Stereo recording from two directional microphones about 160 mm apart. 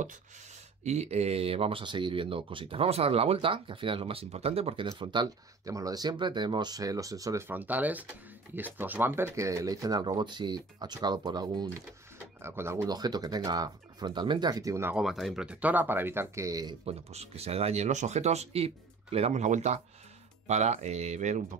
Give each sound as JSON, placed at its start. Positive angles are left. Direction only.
{"t": 0.8, "sound": "speech", "side_deg": -45}
{"t": 12.4, "sound": "speech", "side_deg": -15}
{"t": 15.0, "sound": "speech", "side_deg": 0}
{"t": 16.8, "sound": "speech", "side_deg": -40}